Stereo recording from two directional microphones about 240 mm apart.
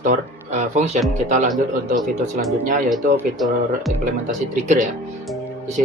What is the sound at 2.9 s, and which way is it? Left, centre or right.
Speech, centre.